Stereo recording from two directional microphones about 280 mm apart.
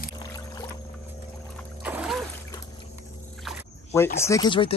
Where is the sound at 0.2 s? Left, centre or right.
Centre.